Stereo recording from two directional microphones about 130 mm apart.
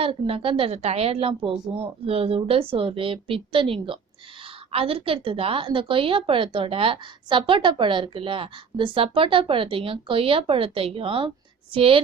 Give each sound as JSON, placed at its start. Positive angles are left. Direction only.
{"t": 0.0, "sound": "a woman's voice", "side_deg": -45}